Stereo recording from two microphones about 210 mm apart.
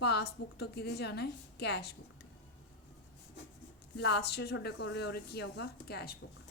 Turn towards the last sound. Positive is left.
turn(degrees=50)  # may be behind; listen again after turning